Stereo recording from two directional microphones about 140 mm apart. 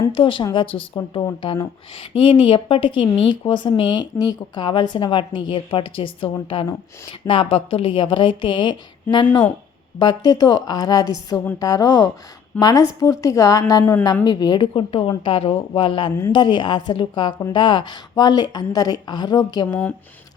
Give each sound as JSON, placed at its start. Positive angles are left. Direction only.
{"t": 0.1, "sound": "speech", "side_deg": 40}
{"t": 10.0, "sound": "a woman's voice", "side_deg": 30}